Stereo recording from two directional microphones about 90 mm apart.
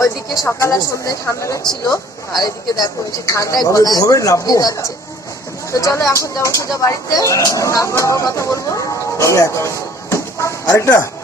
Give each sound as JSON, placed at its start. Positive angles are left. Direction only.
{"t": 0.6, "sound": "speech", "side_deg": 35}